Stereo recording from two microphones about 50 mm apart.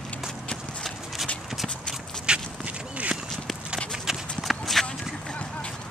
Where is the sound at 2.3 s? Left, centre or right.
Centre.